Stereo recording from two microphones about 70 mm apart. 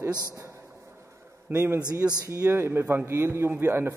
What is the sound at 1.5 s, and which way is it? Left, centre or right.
A man's voice, right.